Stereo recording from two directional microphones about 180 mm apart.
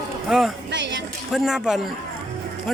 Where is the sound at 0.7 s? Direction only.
80° right.